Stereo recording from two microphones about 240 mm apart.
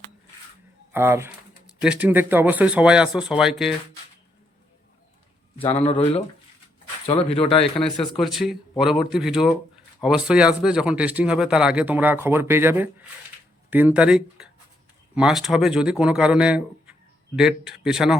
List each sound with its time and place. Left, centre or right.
0.9 s speech: centre
5.6 s speech: left
7.1 s speech: left
7.9 s speech: centre